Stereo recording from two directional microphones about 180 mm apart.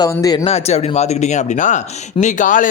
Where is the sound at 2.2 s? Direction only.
45° left (ahead or behind).